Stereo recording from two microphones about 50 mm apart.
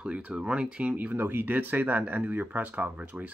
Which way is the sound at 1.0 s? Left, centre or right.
Right.